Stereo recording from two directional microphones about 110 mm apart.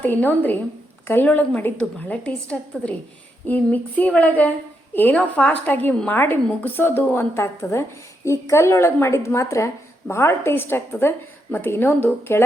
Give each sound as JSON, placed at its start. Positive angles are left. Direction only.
{"t": 0.0, "sound": "a woman's voice", "side_deg": 15}